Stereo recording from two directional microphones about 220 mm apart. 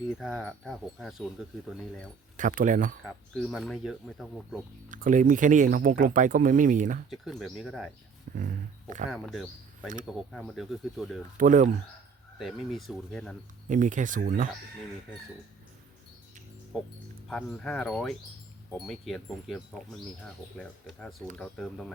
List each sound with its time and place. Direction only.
0.1 s speech: centre (ahead or behind)
2.3 s speech: 35° right (ahead or behind)
3.3 s speech: centre (ahead or behind)
4.9 s speech: 35° right (ahead or behind)
7.1 s speech: centre (ahead or behind)
8.3 s speech: 40° right (ahead or behind)
9.0 s speech: centre (ahead or behind)
11.3 s speech: 35° right (ahead or behind)
12.4 s speech: centre (ahead or behind)
13.7 s speech: 35° right (ahead or behind)
17.2 s speech: centre (ahead or behind)